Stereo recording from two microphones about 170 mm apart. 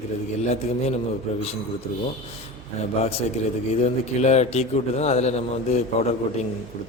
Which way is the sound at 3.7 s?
40° left (ahead or behind).